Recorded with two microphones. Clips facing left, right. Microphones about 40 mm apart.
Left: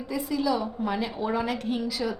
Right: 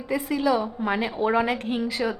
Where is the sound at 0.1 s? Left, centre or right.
Right.